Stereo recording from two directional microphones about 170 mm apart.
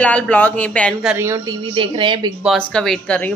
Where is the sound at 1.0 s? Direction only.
15° right (ahead or behind).